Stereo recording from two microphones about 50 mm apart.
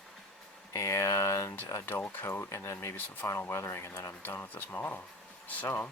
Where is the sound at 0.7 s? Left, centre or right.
Left.